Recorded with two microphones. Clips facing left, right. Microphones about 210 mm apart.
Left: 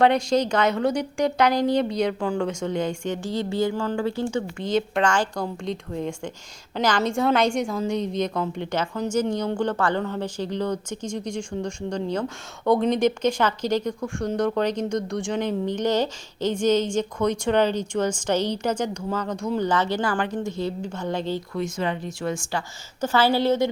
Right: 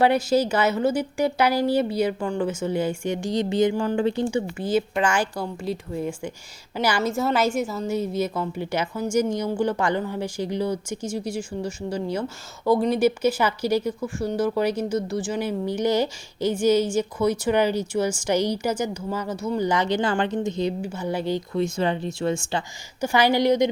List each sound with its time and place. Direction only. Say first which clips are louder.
0.0 s a woman's voice: even; 5° right (ahead or behind)
20.8 s speech: right 1 dB; 10° right (ahead or behind)
21.5 s speech: right 5 dB; 30° right (ahead or behind)
23.0 s speech: right 1 dB; 15° right (ahead or behind)